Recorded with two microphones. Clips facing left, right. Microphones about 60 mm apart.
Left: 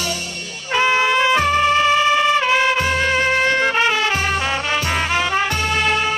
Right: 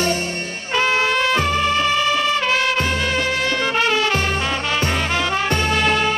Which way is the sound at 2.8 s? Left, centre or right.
Left.